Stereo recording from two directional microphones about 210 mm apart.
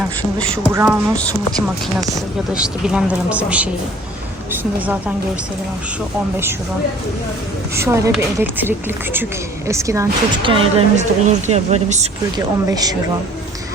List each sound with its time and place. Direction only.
0.3 s a woman's voice: 5° left (ahead or behind)
2.5 s speech: 5° right (ahead or behind)
7.8 s a woman's voice: 15° right (ahead or behind); by 12.0 s 30° right (ahead or behind)
12.7 s speech: 20° right (ahead or behind)